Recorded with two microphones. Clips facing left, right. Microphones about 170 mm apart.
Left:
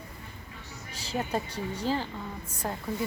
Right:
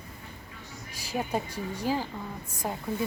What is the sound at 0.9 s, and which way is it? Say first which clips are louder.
Speech: even; 10° right (ahead or behind).